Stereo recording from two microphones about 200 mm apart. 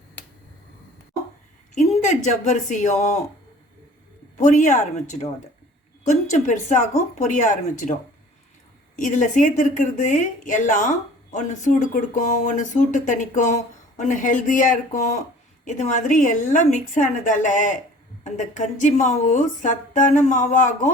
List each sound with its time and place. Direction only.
0.2 s finger snapping: 10° left (ahead or behind)
1.7 s a woman's voice: 35° left (ahead or behind)
4.4 s a woman's voice: 35° left (ahead or behind)
6.3 s a woman's voice: 40° left (ahead or behind)
9.0 s a woman's voice: 35° left (ahead or behind)